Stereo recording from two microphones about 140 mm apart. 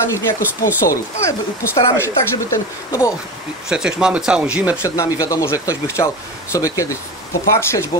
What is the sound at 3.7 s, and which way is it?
Speech, 5° right (ahead or behind).